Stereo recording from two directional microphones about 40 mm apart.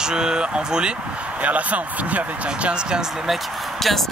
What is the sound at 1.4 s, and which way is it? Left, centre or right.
Speech, right.